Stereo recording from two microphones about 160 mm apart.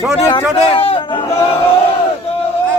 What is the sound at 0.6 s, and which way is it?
Speech, 35° left (ahead or behind).